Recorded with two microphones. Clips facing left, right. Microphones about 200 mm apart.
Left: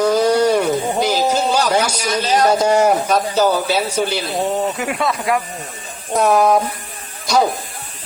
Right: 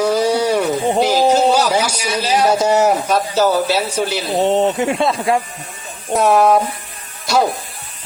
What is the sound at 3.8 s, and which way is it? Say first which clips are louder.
Speech: even; 10° left (ahead or behind).